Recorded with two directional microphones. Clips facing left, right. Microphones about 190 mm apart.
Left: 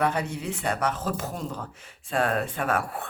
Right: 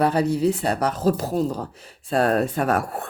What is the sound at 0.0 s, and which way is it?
Speech, 35° right (ahead or behind).